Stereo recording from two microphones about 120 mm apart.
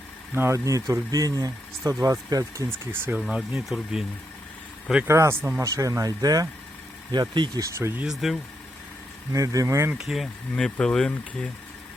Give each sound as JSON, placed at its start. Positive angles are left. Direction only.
{"t": 0.3, "sound": "speech", "side_deg": -25}
{"t": 3.2, "sound": "speech", "side_deg": -5}
{"t": 5.0, "sound": "speech", "side_deg": -25}
{"t": 7.8, "sound": "speech", "side_deg": -20}
{"t": 8.2, "sound": "speech", "side_deg": 0}
{"t": 9.3, "sound": "speech", "side_deg": -30}
{"t": 9.9, "sound": "speech", "side_deg": -5}
{"t": 10.5, "sound": "speech", "side_deg": 10}